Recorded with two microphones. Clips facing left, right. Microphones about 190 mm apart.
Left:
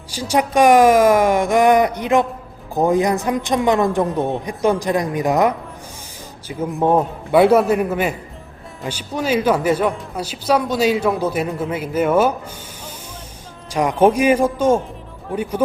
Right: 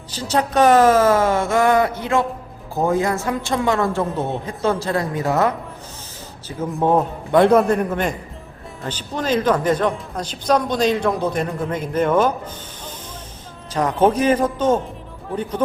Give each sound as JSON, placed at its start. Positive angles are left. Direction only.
{"t": 0.1, "sound": "a woman's voice", "side_deg": 10}
{"t": 13.7, "sound": "a woman's voice", "side_deg": 10}